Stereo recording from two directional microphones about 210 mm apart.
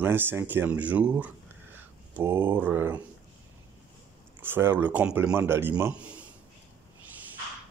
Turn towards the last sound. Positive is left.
turn(degrees=-5)  # may be behind; listen again after turning